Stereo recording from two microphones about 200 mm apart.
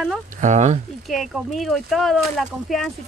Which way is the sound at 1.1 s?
Centre (ahead or behind).